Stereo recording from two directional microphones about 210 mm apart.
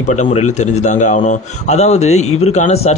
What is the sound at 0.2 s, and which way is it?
Speech, 35° left (ahead or behind).